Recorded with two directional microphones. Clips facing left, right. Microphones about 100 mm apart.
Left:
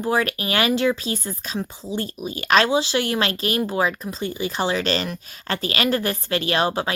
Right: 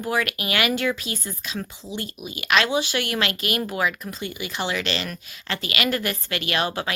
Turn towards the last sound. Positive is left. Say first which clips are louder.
# left 4 dB
turn(degrees=30)  # may be behind; listen again after turning